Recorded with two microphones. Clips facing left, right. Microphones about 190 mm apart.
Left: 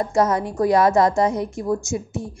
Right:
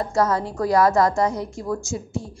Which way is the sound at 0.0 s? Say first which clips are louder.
Left 2 dB; 20° left (ahead or behind).